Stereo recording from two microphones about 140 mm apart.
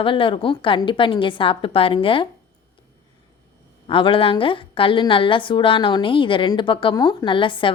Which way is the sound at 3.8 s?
40° left (ahead or behind).